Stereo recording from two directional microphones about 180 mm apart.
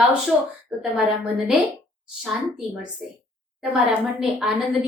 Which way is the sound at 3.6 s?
Centre (ahead or behind).